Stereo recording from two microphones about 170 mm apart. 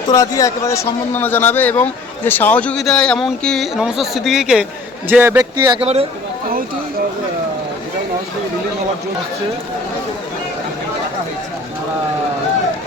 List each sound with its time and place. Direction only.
0.1 s a man's voice: 20° left (ahead or behind); by 5.5 s 10° right (ahead or behind)
5.5 s speech: 25° right (ahead or behind)
5.8 s speech: 35° right (ahead or behind)